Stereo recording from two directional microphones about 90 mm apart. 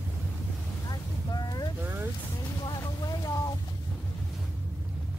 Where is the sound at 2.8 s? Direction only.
45° left (ahead or behind).